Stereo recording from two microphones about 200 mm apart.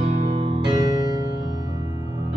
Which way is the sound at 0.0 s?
35° right (ahead or behind).